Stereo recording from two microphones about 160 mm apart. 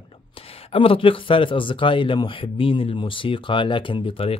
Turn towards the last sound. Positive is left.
turn(degrees=35)  # may be behind; listen again after turning